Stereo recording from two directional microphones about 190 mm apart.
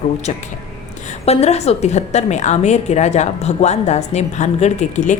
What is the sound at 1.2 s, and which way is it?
A woman's voice, 35° left (ahead or behind).